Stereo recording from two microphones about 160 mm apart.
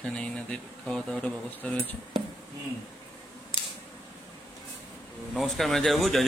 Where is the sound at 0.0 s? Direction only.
5° left (ahead or behind).